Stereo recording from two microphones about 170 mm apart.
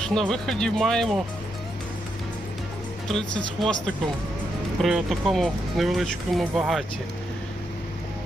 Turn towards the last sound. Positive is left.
turn(degrees=0)  # may be behind; listen again after turning